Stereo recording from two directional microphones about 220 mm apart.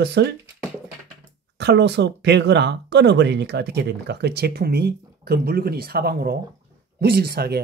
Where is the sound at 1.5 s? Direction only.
50° right (ahead or behind).